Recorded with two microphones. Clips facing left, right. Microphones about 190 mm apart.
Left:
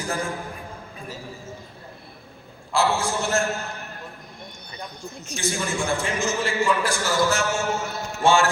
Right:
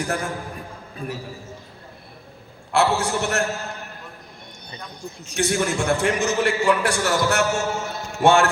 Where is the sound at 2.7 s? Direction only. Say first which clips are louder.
Right 2 dB; 65° right (ahead or behind).